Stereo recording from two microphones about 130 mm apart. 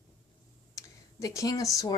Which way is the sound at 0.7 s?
25° left (ahead or behind).